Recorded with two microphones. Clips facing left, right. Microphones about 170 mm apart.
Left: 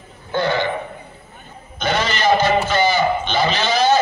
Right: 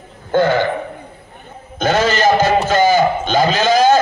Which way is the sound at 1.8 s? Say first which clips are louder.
Right 6 dB; 45° right (ahead or behind).